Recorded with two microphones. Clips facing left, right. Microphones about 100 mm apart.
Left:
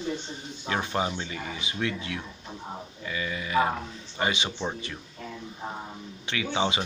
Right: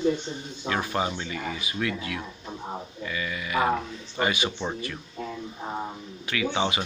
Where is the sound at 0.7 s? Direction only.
20° left (ahead or behind).